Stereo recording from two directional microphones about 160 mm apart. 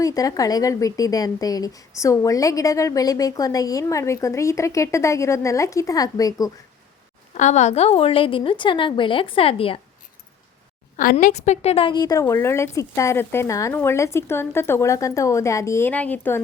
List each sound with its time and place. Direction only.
0.0 s a woman's voice: 20° left (ahead or behind)
7.3 s a woman's voice: 45° left (ahead or behind)
10.9 s a woman's voice: 60° left (ahead or behind); by 16.4 s 10° left (ahead or behind)